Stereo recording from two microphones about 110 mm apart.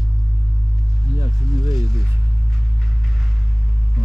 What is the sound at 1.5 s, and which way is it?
Speech, 30° right (ahead or behind).